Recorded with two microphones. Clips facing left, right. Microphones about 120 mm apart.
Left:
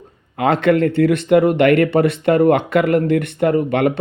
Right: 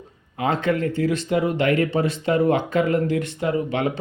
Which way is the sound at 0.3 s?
70° left (ahead or behind).